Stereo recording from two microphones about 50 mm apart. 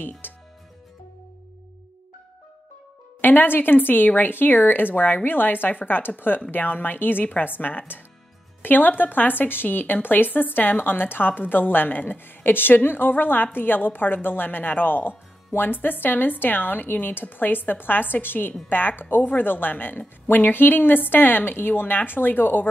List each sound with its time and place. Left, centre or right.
0.2 s music: left
3.2 s speech: left